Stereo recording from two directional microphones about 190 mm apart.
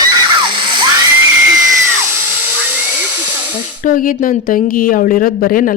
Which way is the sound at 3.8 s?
45° left (ahead or behind).